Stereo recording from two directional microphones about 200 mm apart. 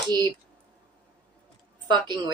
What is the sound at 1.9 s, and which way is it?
Speech, 20° right (ahead or behind).